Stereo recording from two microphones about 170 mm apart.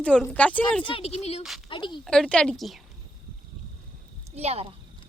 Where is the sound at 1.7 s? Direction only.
30° left (ahead or behind).